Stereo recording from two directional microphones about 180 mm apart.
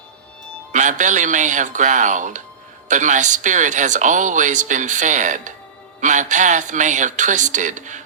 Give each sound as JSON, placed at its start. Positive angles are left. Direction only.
{"t": 0.7, "sound": "speech", "side_deg": -45}